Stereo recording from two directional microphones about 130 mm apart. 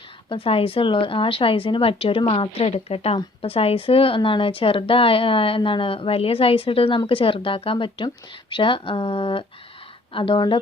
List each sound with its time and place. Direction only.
0.3 s a woman's voice: 45° left (ahead or behind)